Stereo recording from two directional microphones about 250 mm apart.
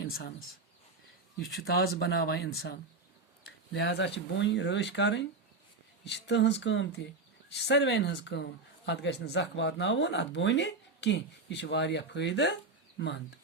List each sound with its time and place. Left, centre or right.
0.0 s speech: left
1.6 s speech: left